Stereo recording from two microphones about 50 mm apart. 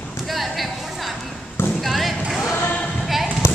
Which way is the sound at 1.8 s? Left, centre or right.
Centre.